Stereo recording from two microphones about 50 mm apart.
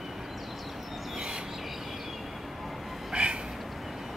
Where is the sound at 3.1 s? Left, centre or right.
Centre.